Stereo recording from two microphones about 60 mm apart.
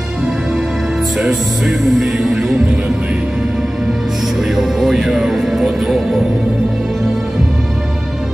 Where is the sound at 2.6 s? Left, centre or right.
Centre.